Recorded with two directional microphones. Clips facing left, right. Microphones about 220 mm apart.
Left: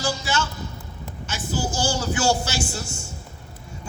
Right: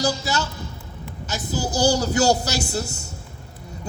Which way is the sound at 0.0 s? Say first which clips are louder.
Right 2 dB; 40° right (ahead or behind).